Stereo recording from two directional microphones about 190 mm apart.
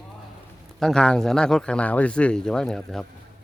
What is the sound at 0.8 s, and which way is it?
Speech, 5° left (ahead or behind).